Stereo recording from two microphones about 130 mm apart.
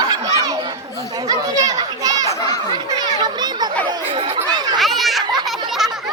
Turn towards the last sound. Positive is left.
turn(degrees=0)  # may be behind; listen again after turning